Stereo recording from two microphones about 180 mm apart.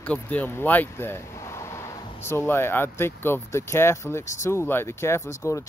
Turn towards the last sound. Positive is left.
turn(degrees=15)  # may be behind; listen again after turning